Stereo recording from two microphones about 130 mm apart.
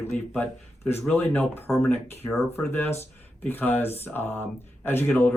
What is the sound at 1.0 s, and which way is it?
Speech, 10° left (ahead or behind).